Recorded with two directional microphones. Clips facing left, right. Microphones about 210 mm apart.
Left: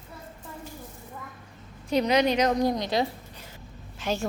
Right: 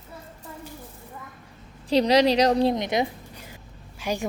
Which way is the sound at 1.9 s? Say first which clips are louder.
Right 4 dB; 35° right (ahead or behind).